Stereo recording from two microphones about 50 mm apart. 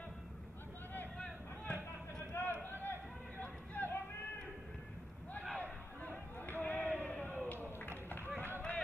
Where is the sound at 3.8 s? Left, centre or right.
Left.